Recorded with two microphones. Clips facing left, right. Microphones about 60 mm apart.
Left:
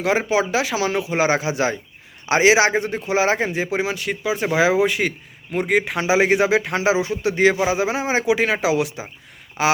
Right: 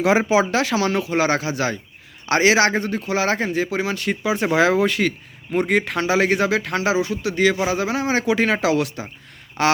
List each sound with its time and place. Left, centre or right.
0.0 s a man's voice: centre; by 3.9 s left
3.9 s speech: centre
5.5 s speech: centre
9.6 s quack: centre